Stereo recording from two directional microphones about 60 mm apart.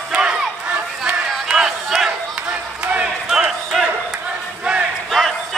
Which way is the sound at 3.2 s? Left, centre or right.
Centre.